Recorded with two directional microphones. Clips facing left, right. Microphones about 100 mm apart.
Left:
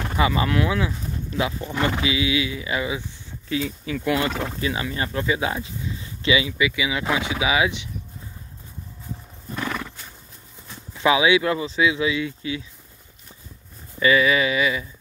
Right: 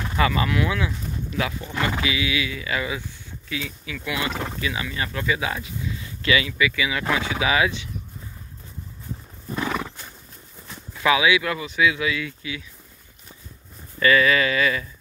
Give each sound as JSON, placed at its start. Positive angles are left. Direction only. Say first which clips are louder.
{"t": 0.1, "sound": "speech", "louder": "left 1 dB", "side_deg": 20}
{"t": 3.4, "sound": "speech", "louder": "left 6 dB", "side_deg": 35}
{"t": 9.5, "sound": "horse", "louder": "right 2 dB", "side_deg": -5}
{"t": 11.0, "sound": "speech", "louder": "left 2 dB", "side_deg": 25}
{"t": 13.9, "sound": "speech", "louder": "even", "side_deg": 15}